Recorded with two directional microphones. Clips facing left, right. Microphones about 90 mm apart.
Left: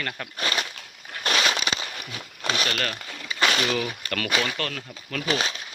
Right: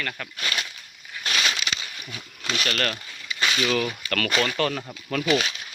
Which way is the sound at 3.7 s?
10° left (ahead or behind).